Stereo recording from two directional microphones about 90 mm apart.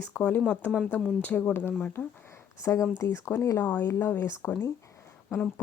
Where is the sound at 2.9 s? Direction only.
35° left (ahead or behind).